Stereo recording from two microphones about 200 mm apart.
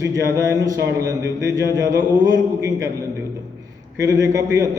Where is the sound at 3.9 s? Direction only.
15° right (ahead or behind).